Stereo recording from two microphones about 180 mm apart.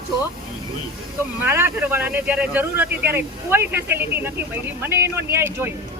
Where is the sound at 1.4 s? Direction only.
10° right (ahead or behind).